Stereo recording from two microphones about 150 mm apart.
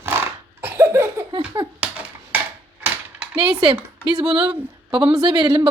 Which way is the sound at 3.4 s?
35° right (ahead or behind).